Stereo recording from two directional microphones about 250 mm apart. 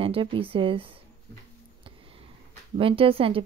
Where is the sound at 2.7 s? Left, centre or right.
Right.